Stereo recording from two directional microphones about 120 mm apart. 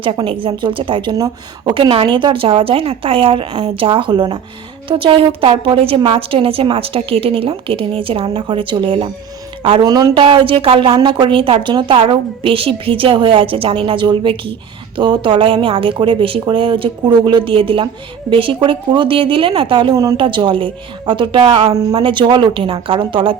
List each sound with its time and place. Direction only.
0.0 s a woman's voice: 45° right (ahead or behind)
1.1 s speech: 30° right (ahead or behind)
1.7 s a woman's voice: 45° right (ahead or behind)
9.8 s speech: 35° right (ahead or behind)
10.2 s a woman's voice: 45° right (ahead or behind); by 20.1 s 30° right (ahead or behind)
20.1 s a woman's voice: 45° right (ahead or behind)
21.7 s speech: 30° right (ahead or behind)
22.0 s a woman's voice: 40° right (ahead or behind)